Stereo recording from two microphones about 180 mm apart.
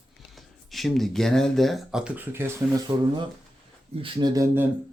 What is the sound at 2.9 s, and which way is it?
Speech, 30° right (ahead or behind).